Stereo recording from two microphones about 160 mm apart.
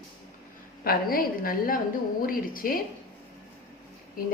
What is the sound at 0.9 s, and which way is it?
A woman's voice, 65° left (ahead or behind).